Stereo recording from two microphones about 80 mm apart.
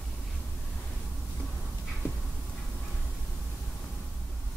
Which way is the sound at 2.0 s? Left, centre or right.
Left.